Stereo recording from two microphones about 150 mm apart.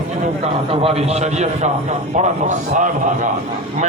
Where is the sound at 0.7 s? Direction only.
40° right (ahead or behind).